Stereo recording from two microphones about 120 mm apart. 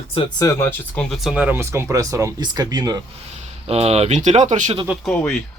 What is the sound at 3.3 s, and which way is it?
Speech, 60° right (ahead or behind).